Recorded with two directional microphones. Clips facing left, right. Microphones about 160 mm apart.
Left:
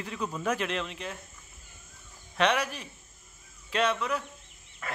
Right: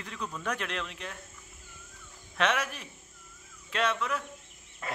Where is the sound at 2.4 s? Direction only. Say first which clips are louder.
Left 3 dB; centre (ahead or behind).